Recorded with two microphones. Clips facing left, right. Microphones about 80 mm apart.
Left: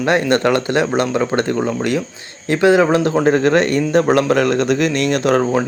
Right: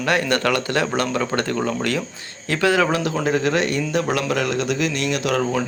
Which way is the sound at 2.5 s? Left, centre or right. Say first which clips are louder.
Left 6 dB; left.